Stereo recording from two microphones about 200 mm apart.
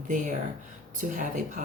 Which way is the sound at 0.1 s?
40° right (ahead or behind).